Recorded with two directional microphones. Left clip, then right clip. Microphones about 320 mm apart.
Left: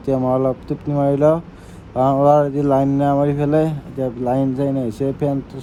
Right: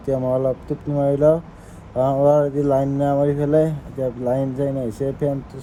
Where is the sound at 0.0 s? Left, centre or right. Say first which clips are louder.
Left 2 dB; centre.